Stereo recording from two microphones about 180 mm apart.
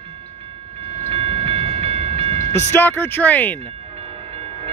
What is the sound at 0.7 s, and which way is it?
Train, 35° right (ahead or behind).